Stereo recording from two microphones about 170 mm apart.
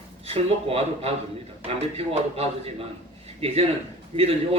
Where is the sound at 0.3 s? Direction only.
35° right (ahead or behind).